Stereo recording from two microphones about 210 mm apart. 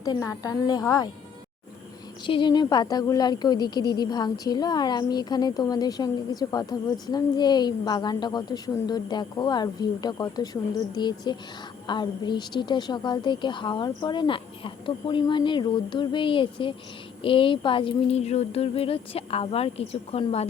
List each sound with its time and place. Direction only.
0.0 s a woman's voice: 15° left (ahead or behind)
2.2 s a woman's voice: 20° left (ahead or behind)